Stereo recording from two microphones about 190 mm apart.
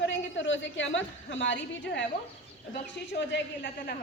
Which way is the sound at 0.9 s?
75° left (ahead or behind).